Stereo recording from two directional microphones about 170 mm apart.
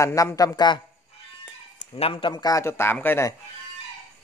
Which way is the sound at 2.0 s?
35° left (ahead or behind).